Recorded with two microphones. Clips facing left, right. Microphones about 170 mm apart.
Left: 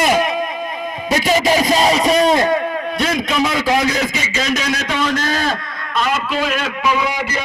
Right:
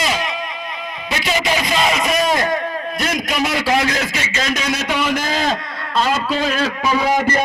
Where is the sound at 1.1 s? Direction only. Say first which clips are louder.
Left 5 dB; 40° left (ahead or behind).